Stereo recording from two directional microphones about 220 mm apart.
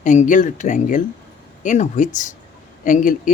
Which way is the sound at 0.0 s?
35° left (ahead or behind).